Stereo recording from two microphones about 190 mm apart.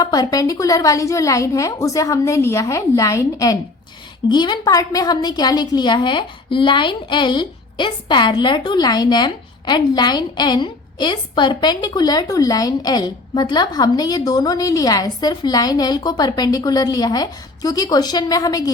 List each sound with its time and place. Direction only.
0.0 s a woman's voice: 20° left (ahead or behind)